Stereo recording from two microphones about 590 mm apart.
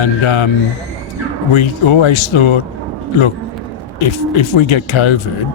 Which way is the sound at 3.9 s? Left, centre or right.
Left.